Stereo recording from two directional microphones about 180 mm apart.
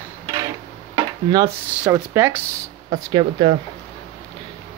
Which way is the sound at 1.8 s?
10° right (ahead or behind).